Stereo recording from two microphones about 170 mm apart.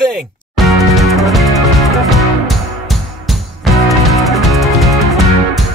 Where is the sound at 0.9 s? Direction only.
Centre (ahead or behind).